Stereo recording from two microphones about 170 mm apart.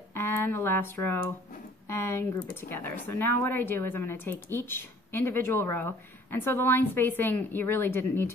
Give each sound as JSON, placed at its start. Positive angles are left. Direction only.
{"t": 0.1, "sound": "a woman's voice", "side_deg": 15}